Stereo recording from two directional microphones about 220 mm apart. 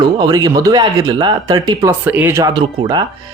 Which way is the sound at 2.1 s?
10° right (ahead or behind).